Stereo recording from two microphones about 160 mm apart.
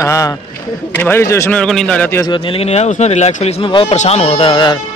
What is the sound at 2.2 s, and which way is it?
Speech, 30° left (ahead or behind).